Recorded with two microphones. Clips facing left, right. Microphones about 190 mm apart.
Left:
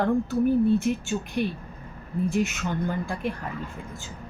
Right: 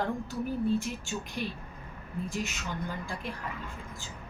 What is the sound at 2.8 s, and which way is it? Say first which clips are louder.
Speech: left 8 dB; 60° left (ahead or behind).